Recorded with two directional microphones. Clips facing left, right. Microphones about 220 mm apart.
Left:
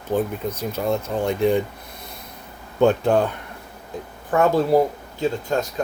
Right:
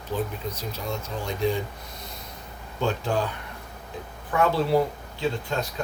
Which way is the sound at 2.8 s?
60° left (ahead or behind).